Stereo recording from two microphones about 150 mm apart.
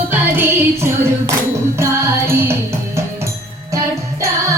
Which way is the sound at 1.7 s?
15° right (ahead or behind).